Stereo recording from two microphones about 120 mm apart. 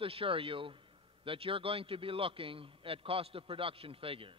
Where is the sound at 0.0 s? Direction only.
50° right (ahead or behind).